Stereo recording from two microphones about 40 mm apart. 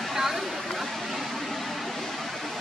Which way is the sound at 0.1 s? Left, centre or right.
Centre.